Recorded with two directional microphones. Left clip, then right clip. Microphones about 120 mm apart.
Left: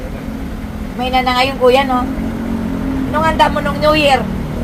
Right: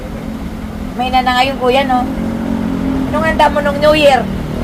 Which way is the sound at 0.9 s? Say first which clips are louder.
Right 2 dB; 5° right (ahead or behind).